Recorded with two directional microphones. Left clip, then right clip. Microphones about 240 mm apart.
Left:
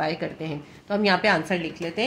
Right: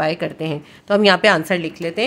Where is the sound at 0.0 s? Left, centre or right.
Right.